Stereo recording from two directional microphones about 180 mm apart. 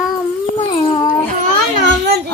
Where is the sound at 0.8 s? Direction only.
25° left (ahead or behind).